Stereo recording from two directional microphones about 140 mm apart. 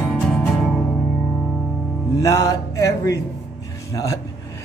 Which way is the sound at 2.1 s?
25° left (ahead or behind).